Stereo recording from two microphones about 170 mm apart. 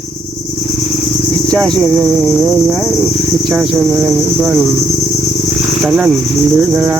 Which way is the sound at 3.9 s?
15° right (ahead or behind).